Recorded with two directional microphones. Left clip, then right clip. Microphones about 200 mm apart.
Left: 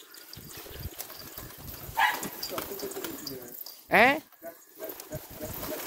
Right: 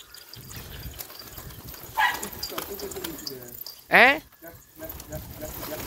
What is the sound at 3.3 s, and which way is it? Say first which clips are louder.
Bird: right 3 dB; 60° left (ahead or behind).